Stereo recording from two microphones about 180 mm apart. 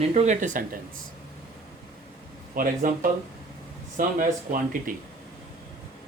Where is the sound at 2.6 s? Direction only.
50° right (ahead or behind).